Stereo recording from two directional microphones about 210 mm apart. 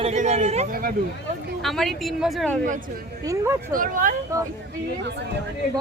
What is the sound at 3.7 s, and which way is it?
Speech, 40° right (ahead or behind).